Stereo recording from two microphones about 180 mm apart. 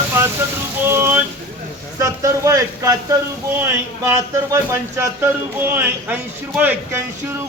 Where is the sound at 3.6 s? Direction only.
15° right (ahead or behind).